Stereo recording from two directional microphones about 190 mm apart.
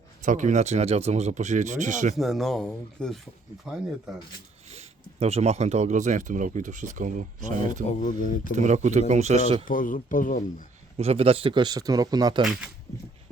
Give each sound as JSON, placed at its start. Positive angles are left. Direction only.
{"t": 0.2, "sound": "speech", "side_deg": -40}
{"t": 2.1, "sound": "speech", "side_deg": 0}
{"t": 4.7, "sound": "speech", "side_deg": -35}
{"t": 7.9, "sound": "speech", "side_deg": 45}
{"t": 8.5, "sound": "speech", "side_deg": -35}
{"t": 9.6, "sound": "speech", "side_deg": 45}
{"t": 10.9, "sound": "speech", "side_deg": -30}
{"t": 12.4, "sound": "speech", "side_deg": 0}